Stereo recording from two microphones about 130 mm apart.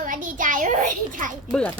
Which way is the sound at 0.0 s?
90° right.